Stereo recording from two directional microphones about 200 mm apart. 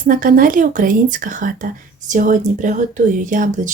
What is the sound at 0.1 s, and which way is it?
A woman's voice, 45° right (ahead or behind).